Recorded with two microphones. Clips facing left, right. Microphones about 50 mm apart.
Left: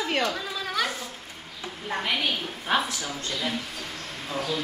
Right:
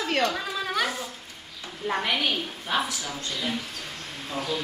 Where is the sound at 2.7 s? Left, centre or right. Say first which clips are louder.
Left 2 dB; left.